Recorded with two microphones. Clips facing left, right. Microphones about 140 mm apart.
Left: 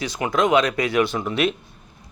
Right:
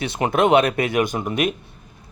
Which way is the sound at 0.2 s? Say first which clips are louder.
Right 4 dB; 35° right (ahead or behind).